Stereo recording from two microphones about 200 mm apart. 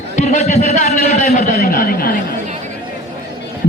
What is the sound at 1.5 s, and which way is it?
Speech, 50° left (ahead or behind).